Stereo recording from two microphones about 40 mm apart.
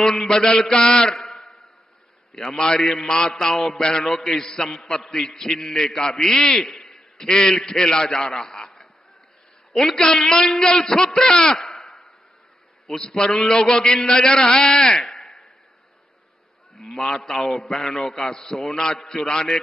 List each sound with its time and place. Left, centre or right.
0.5 s a man's voice: centre
1.4 s a sound: centre
2.3 s a man's voice: centre
3.3 s a man's voice: centre
9.7 s a sound: centre
10.0 s a man's voice: centre
11.8 s a sound: centre
12.9 s a man's voice: centre
16.7 s sheep: centre
17.3 s a man's voice: centre